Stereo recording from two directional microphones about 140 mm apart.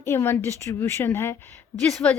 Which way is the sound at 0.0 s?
20° left (ahead or behind).